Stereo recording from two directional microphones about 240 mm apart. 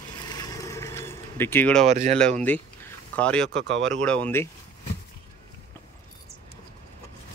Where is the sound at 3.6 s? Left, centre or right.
Right.